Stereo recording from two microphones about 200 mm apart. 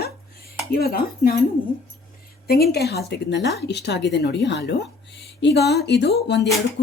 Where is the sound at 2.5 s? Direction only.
50° left (ahead or behind).